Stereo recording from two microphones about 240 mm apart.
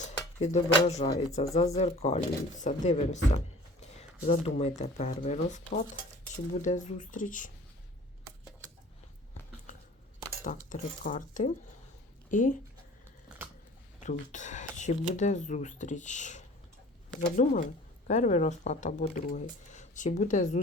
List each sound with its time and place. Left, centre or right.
0.0 s speech: left
10.7 s speech: left
14.0 s speech: left